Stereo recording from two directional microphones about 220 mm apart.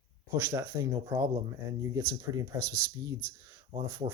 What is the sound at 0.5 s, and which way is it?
Speech, 15° right (ahead or behind).